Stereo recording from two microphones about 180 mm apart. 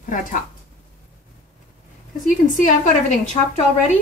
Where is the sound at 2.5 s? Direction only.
45° left (ahead or behind).